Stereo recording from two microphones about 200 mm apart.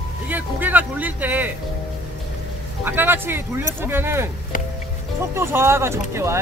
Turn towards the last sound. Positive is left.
turn(degrees=-15)  # may be behind; listen again after turning